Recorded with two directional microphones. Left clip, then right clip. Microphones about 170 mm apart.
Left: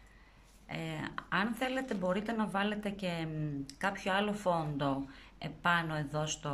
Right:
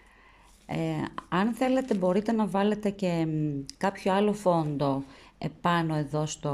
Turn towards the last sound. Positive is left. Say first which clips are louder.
# right 6 dB
turn(degrees=-25)  # may be behind; listen again after turning